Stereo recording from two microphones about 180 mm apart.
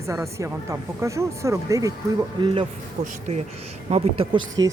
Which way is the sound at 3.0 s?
40° right (ahead or behind).